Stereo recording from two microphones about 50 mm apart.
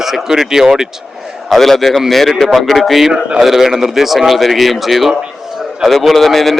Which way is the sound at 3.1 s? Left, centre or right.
Centre.